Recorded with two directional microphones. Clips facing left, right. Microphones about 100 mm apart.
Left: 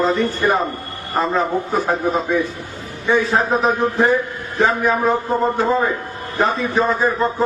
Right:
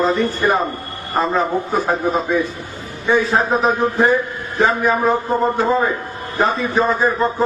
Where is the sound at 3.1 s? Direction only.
10° right (ahead or behind).